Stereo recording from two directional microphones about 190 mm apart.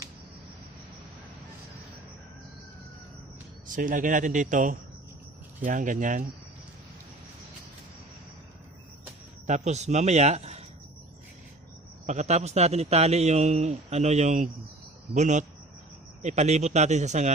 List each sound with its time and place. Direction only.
3.8 s a man's voice: 45° right (ahead or behind)
9.5 s a man's voice: 35° right (ahead or behind)
12.0 s a man's voice: 35° right (ahead or behind)